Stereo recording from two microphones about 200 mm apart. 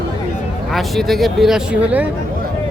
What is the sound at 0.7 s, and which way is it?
Speech, centre (ahead or behind).